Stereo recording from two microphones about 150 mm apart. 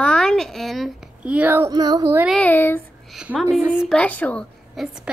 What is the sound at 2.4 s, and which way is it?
Speech, 10° left (ahead or behind).